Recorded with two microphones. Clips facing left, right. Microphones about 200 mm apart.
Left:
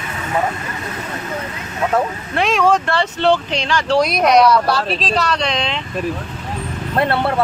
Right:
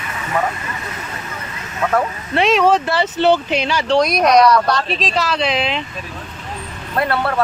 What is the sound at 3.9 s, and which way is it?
Speech, 5° left (ahead or behind).